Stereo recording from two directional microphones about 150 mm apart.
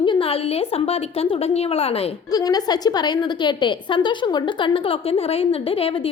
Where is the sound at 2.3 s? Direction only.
25° left (ahead or behind).